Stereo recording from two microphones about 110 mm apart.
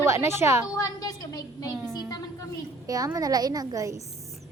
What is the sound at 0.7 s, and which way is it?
Speech, 35° left (ahead or behind).